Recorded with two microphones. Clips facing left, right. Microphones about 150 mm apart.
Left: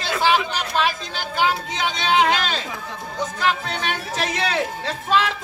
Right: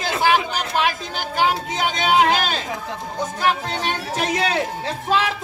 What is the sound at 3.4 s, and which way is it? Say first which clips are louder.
Speech: right 2 dB; 15° right (ahead or behind).